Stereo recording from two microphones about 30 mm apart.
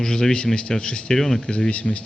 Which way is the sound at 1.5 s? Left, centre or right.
Left.